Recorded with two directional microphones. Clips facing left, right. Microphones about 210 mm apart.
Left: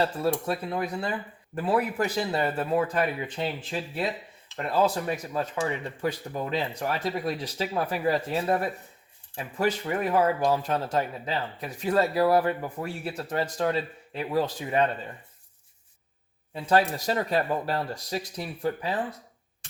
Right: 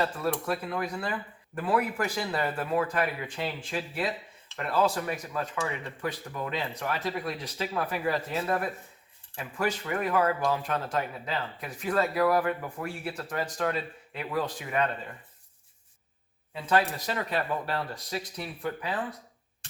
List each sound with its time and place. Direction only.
0.0 s speech: 30° left (ahead or behind)
16.6 s speech: 35° left (ahead or behind)